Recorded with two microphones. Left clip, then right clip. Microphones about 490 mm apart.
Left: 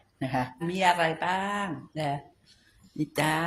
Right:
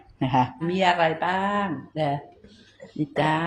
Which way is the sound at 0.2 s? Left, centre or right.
Left.